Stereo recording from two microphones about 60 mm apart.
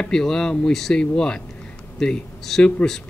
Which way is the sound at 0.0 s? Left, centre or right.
Centre.